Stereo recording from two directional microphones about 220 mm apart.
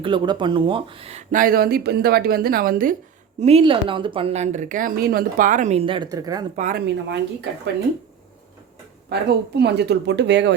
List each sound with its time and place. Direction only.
0.0 s speech: 20° right (ahead or behind); by 2.9 s 40° right (ahead or behind)
3.4 s a woman's voice: 25° right (ahead or behind)
6.6 s speech: 40° right (ahead or behind)
9.6 s speech: 50° right (ahead or behind)